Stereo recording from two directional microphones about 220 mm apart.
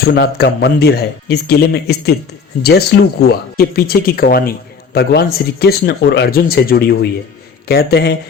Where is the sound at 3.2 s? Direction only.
45° left (ahead or behind).